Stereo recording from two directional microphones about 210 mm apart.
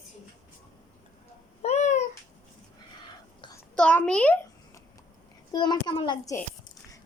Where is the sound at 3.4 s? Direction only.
15° left (ahead or behind).